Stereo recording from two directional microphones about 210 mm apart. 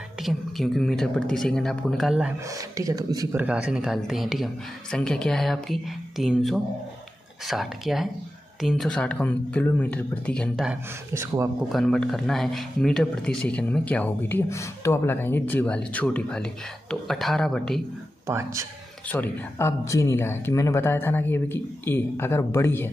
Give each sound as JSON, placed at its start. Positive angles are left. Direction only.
{"t": 0.2, "sound": "speech", "side_deg": 0}
{"t": 2.5, "sound": "speech", "side_deg": -15}
{"t": 3.4, "sound": "speech", "side_deg": -5}
{"t": 11.7, "sound": "speech", "side_deg": 5}
{"t": 18.2, "sound": "speech", "side_deg": -15}
{"t": 19.0, "sound": "speech", "side_deg": 10}